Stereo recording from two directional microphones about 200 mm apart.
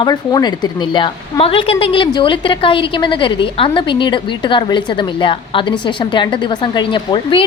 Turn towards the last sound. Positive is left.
turn(degrees=25)  # may be behind; listen again after turning